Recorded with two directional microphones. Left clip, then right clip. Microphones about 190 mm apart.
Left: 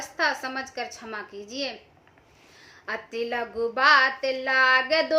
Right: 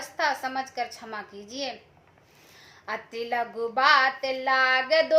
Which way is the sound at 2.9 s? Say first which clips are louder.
Left 1 dB; 15° left (ahead or behind).